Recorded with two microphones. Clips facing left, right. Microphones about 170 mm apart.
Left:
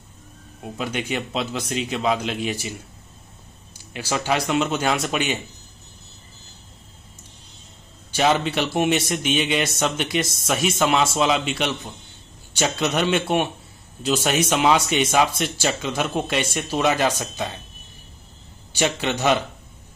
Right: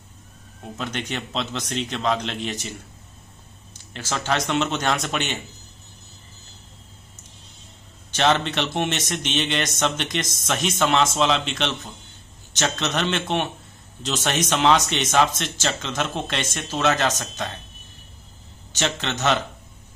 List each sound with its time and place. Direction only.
0.7 s speech: 10° left (ahead or behind)
3.9 s speech: 10° left (ahead or behind)
8.1 s speech: 10° left (ahead or behind)
18.7 s speech: 10° left (ahead or behind)